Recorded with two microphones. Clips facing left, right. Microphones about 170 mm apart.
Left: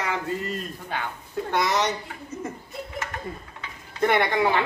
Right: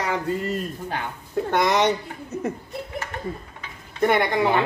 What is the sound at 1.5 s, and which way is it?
Speech, 55° right (ahead or behind).